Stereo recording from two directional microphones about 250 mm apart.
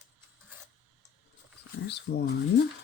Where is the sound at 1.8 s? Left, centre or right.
Left.